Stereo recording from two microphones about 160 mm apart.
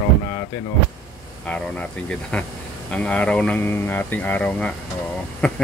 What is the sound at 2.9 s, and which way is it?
Speech, 5° left (ahead or behind).